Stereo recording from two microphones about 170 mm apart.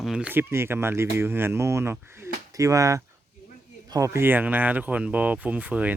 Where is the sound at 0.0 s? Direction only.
5° right (ahead or behind).